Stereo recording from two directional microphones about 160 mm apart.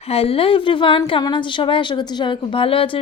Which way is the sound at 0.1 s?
35° left (ahead or behind).